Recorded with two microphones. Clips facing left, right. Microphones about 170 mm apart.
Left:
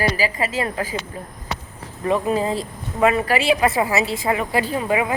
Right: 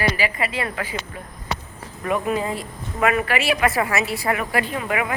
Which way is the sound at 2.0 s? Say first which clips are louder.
Left 3 dB; 30° left (ahead or behind).